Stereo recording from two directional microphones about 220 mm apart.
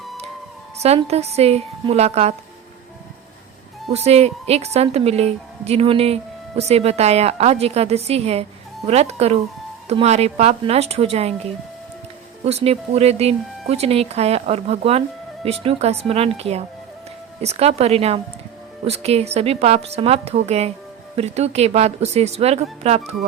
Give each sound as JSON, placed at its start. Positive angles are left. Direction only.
{"t": 0.8, "sound": "speech", "side_deg": -30}
{"t": 3.8, "sound": "speech", "side_deg": -30}
{"t": 12.5, "sound": "speech", "side_deg": -30}